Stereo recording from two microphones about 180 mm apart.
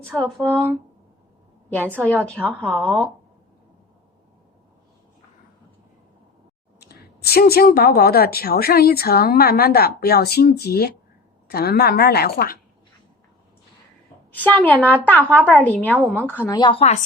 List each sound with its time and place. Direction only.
0.1 s speech: centre (ahead or behind)
2.0 s a woman's voice: 5° left (ahead or behind)
2.5 s speech: 10° right (ahead or behind)
6.7 s a woman's voice: 60° left (ahead or behind)
14.3 s a woman's voice: 10° left (ahead or behind)
16.5 s a woman's voice: 25° left (ahead or behind)